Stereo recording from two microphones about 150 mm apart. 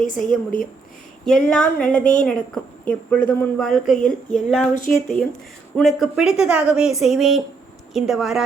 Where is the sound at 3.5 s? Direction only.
Centre (ahead or behind).